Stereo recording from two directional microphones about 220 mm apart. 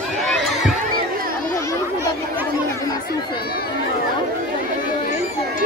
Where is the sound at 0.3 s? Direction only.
Centre (ahead or behind).